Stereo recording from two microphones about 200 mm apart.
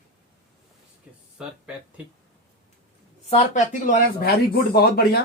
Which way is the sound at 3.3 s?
40° left (ahead or behind).